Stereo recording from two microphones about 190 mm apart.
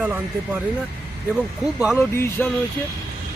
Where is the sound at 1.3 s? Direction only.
5° right (ahead or behind).